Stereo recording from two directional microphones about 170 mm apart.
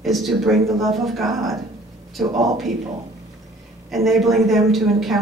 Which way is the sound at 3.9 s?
Centre (ahead or behind).